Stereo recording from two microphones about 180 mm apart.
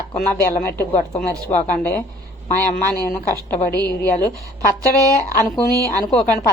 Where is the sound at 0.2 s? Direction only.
10° left (ahead or behind).